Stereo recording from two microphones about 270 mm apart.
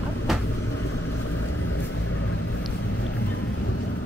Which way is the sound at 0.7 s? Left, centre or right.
Left.